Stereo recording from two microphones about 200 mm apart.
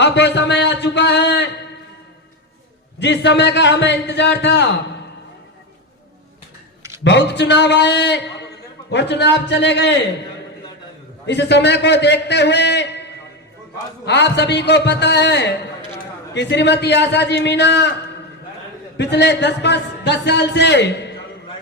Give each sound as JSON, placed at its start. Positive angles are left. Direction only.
{"t": 0.0, "sound": "a man's voice", "side_deg": 60}
{"t": 3.0, "sound": "a man's voice", "side_deg": 60}
{"t": 7.0, "sound": "a man's voice", "side_deg": 60}
{"t": 11.3, "sound": "a man's voice", "side_deg": 60}
{"t": 18.9, "sound": "a man's voice", "side_deg": 60}